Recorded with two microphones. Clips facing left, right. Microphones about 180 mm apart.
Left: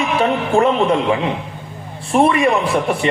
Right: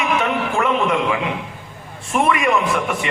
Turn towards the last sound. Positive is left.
turn(degrees=35)  # may be behind; listen again after turning